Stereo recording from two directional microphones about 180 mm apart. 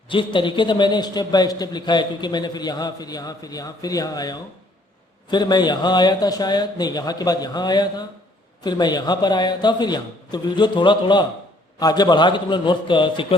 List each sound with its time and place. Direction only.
0.1 s a man's voice: 25° left (ahead or behind)